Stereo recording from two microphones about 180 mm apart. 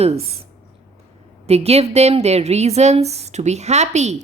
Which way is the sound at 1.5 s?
35° right (ahead or behind).